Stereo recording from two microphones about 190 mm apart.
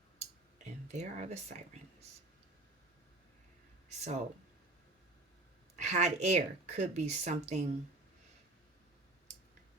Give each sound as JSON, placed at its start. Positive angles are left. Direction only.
{"t": 0.6, "sound": "speech", "side_deg": -35}
{"t": 3.8, "sound": "a sound", "side_deg": -35}
{"t": 5.8, "sound": "speech", "side_deg": -35}